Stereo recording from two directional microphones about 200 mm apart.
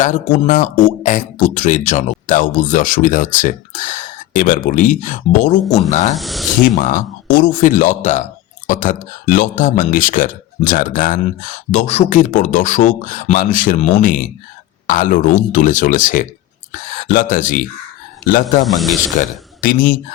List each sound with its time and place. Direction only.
0.0 s speech: 40° left (ahead or behind)
6.1 s speech: centre (ahead or behind)
6.7 s speech: 40° left (ahead or behind)
18.6 s speech: centre (ahead or behind)
19.2 s speech: 40° left (ahead or behind)